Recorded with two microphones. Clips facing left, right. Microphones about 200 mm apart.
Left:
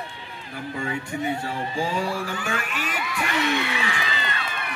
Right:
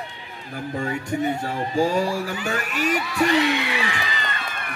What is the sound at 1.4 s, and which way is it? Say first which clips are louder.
Speech: right 5 dB; 45° right (ahead or behind).